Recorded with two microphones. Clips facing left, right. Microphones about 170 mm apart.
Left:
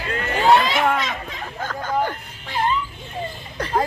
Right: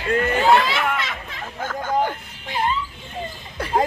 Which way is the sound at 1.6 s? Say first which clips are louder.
Right 1 dB; 10° right (ahead or behind).